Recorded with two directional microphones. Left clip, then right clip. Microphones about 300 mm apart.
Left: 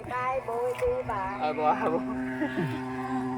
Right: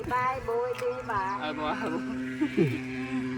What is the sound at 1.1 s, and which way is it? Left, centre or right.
Speech, right.